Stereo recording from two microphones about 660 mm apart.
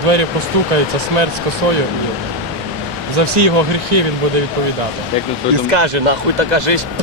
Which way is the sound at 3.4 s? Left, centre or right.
Right.